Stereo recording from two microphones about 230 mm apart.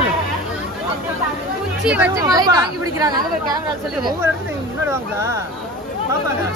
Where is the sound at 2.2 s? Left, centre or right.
Centre.